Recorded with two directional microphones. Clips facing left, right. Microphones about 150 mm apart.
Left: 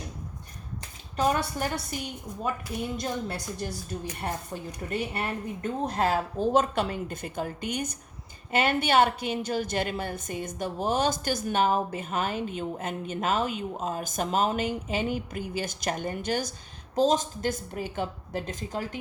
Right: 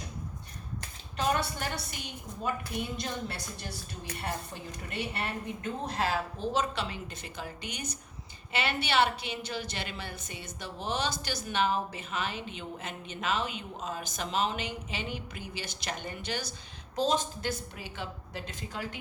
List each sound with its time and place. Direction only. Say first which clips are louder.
1.1 s a woman's voice: left 4 dB; 45° left (ahead or behind)
3.0 s a woman's voice: left 5 dB; 45° left (ahead or behind)
4.9 s a woman's voice: left 5 dB; 45° left (ahead or behind)